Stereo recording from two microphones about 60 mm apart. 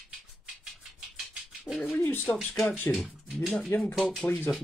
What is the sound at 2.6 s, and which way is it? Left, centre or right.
Speech, left.